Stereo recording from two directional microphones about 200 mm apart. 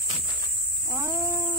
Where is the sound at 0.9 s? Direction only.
15° right (ahead or behind).